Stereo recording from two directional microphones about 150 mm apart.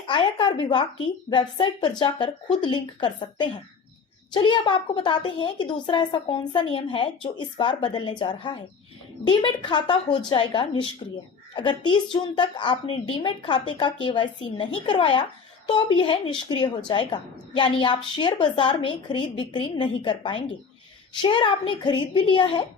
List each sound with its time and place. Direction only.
0.1 s speech: 35° left (ahead or behind)